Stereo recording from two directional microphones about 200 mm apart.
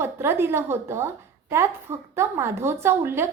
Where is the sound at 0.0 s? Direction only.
10° right (ahead or behind).